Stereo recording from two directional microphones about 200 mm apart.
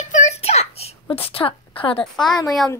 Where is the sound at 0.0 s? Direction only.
35° left (ahead or behind).